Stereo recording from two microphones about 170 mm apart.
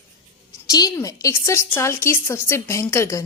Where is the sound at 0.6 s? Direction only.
20° left (ahead or behind).